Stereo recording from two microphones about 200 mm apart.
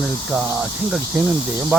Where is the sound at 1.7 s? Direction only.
5° right (ahead or behind).